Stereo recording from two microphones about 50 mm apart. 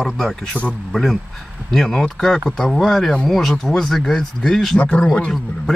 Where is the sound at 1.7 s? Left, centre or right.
Centre.